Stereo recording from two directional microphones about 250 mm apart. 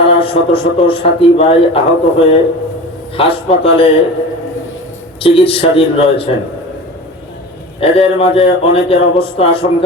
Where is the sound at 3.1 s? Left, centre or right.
Left.